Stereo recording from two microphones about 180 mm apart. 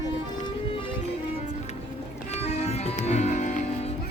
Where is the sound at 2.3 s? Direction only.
35° left (ahead or behind).